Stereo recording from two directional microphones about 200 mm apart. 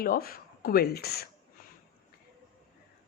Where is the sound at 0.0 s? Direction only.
45° left (ahead or behind).